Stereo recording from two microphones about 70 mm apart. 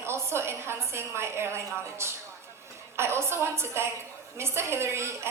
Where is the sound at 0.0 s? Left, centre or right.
Right.